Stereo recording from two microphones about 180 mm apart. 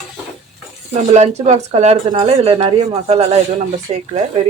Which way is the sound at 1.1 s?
40° right (ahead or behind).